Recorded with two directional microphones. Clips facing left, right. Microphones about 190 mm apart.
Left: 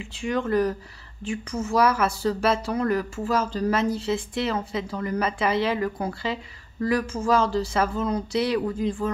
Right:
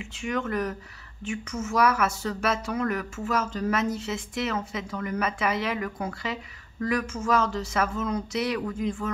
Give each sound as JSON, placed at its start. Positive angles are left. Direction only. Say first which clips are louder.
{"t": 0.0, "sound": "speech", "louder": "left 3 dB", "side_deg": 35}